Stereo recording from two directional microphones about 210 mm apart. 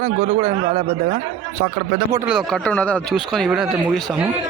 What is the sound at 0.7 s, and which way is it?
Speech, 40° right (ahead or behind).